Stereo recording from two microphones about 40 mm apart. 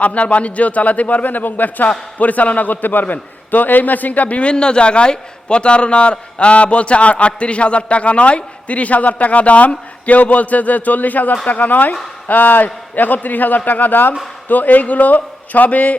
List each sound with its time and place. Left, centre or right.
0.0 s a man's voice: left
4.5 s a man's voice: left